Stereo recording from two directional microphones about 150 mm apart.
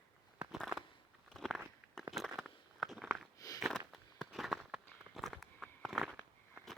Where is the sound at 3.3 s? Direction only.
25° left (ahead or behind).